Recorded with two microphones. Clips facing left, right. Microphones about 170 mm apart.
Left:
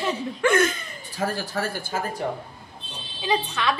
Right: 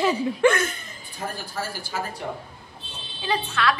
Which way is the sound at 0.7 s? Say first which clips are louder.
Left 6 dB; 90° left.